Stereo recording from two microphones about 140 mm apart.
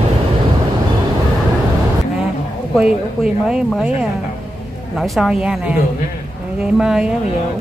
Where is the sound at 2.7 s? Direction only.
5° right (ahead or behind).